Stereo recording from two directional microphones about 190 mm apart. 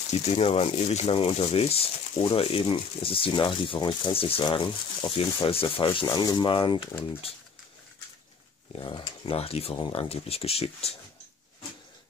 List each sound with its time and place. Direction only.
0.1 s speech: 35° left (ahead or behind)
8.7 s speech: 25° left (ahead or behind)